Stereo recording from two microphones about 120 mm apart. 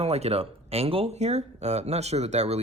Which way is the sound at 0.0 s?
60° right (ahead or behind).